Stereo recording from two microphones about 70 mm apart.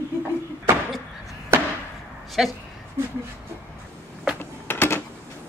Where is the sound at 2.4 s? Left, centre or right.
Centre.